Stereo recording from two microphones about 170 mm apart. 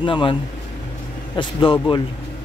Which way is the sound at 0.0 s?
30° left (ahead or behind).